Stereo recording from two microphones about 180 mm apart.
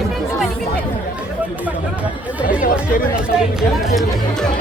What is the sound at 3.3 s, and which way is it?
Music, centre (ahead or behind).